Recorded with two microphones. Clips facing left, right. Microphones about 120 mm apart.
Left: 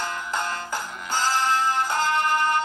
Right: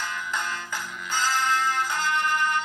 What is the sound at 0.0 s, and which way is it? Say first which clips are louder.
Music: left 3 dB; 40° left (ahead or behind).